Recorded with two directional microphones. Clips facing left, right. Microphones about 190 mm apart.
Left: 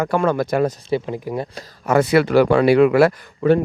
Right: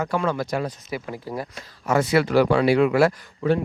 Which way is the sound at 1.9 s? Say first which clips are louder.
Left 4 dB; 60° left (ahead or behind).